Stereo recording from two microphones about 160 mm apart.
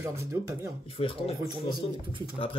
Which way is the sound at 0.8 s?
35° left (ahead or behind).